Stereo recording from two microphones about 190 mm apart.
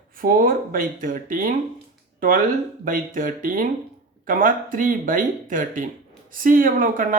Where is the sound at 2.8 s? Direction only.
45° right (ahead or behind).